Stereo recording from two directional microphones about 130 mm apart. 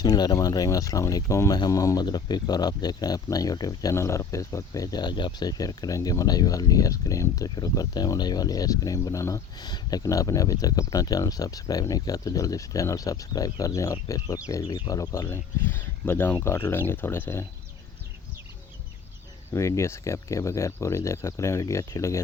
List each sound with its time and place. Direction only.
0.0 s speech: 30° left (ahead or behind)
19.5 s speech: 20° left (ahead or behind)